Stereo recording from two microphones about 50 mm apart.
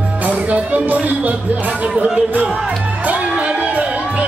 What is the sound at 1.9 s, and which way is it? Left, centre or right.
Music, centre.